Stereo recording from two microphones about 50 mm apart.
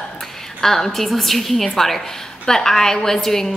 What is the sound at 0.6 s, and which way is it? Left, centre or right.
A woman's voice, centre.